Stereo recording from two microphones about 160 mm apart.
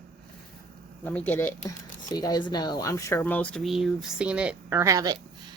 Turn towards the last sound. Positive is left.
turn(degrees=-25)  # may be behind; listen again after turning